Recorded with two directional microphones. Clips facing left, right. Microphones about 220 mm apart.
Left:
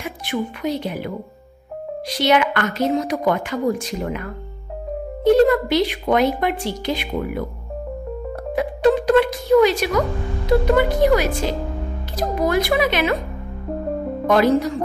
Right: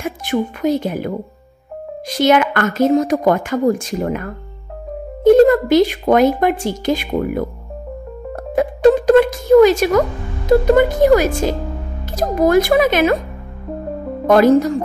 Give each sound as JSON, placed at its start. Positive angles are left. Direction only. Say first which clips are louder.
{"t": 0.0, "sound": "speech", "louder": "right 5 dB", "side_deg": -45}
{"t": 8.5, "sound": "speech", "louder": "right 5 dB", "side_deg": -45}
{"t": 14.2, "sound": "speech", "louder": "right 6 dB", "side_deg": -45}